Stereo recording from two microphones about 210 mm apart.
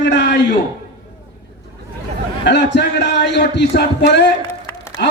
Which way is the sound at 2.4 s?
55° left (ahead or behind).